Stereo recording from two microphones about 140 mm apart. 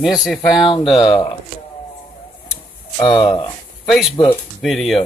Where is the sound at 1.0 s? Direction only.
35° left (ahead or behind).